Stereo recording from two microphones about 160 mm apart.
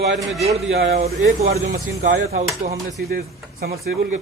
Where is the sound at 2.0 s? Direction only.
50° right (ahead or behind).